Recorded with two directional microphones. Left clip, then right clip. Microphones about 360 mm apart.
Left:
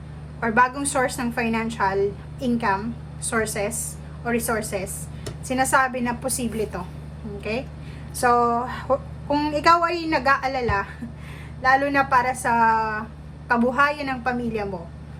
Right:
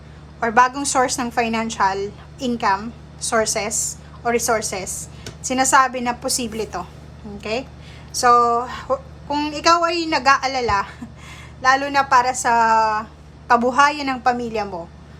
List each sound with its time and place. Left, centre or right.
0.3 s a woman's voice: centre
8.2 s a woman's voice: centre